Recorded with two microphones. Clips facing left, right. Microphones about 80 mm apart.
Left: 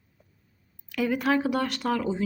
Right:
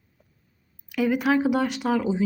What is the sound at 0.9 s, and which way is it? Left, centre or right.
Speech, centre.